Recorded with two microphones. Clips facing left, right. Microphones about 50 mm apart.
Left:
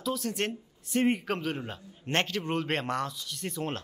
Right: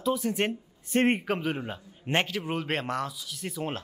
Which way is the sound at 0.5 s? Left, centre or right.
Right.